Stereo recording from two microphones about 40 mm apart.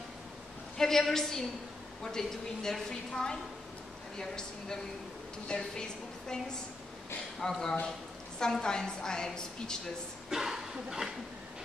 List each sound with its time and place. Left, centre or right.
0.7 s a woman's voice: centre
10.3 s speech: centre